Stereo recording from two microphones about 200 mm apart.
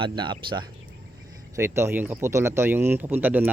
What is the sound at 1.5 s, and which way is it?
Speech, 15° right (ahead or behind).